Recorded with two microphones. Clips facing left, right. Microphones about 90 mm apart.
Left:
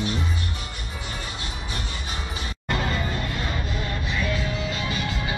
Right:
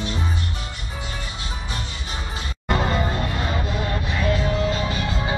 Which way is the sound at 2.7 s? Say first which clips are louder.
Right 5 dB; 40° right (ahead or behind).